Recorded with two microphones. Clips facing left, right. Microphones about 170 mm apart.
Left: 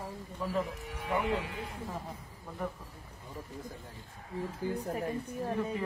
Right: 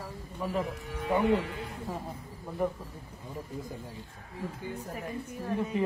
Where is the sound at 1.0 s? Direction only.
20° right (ahead or behind).